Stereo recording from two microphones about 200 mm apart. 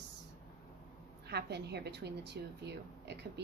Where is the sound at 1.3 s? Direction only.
55° right (ahead or behind).